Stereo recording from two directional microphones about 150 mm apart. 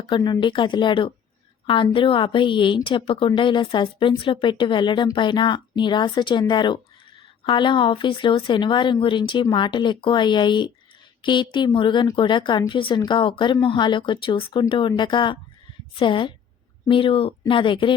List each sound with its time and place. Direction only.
0.1 s a woman's voice: 30° left (ahead or behind)